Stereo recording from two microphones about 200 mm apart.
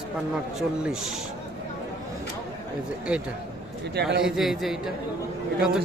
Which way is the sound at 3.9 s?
55° right (ahead or behind).